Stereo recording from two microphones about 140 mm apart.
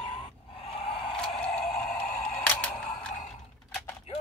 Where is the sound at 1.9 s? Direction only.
80° left.